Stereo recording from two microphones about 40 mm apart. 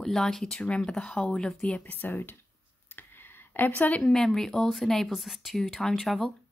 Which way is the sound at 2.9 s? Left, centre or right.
Left.